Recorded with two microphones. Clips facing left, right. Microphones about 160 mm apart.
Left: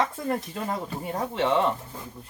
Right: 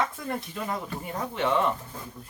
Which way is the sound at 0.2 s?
40° left (ahead or behind).